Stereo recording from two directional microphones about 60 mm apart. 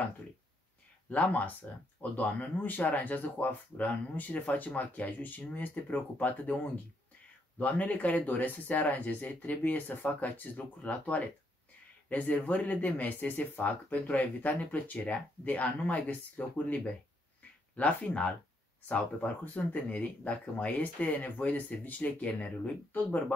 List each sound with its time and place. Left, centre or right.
1.1 s speech: left